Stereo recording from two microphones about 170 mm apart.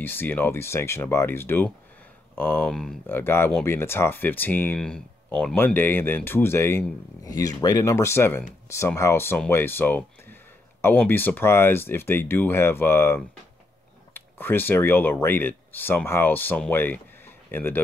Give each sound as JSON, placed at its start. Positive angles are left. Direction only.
{"t": 0.0, "sound": "speech", "side_deg": 10}